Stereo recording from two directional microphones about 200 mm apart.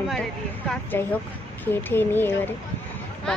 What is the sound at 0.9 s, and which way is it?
A woman's voice, 10° left (ahead or behind).